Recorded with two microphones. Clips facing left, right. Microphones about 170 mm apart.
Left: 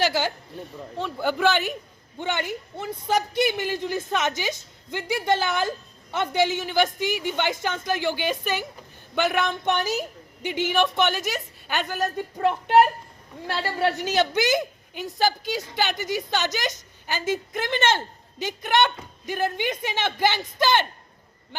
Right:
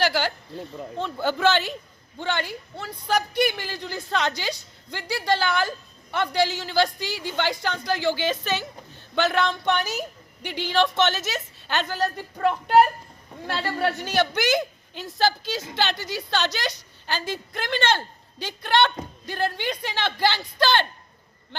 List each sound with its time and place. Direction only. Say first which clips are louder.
0.1 s a woman's voice: even; 20° left (ahead or behind)
1.0 s a woman's voice: even; 10° left (ahead or behind)
13.6 s a woman's voice: left 1 dB; 10° left (ahead or behind)